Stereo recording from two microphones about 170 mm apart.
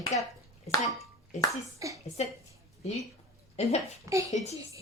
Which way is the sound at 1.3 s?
45° left (ahead or behind).